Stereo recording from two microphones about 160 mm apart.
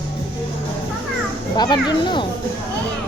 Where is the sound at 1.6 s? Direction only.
25° left (ahead or behind).